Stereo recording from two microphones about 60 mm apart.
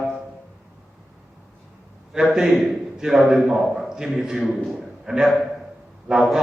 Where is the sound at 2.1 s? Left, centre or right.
Centre.